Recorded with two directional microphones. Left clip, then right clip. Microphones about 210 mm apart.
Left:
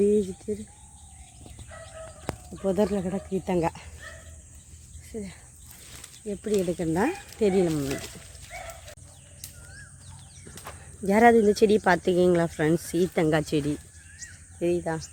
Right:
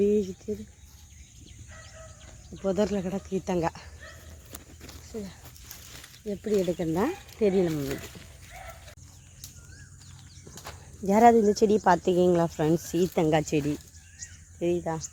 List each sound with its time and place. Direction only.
0.0 s speech: 10° left (ahead or behind)
2.6 s speech: 15° left (ahead or behind)
6.2 s speech: 5° left (ahead or behind)
11.0 s speech: centre (ahead or behind)